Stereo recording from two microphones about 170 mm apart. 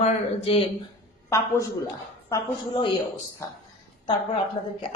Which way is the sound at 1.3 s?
20° left (ahead or behind).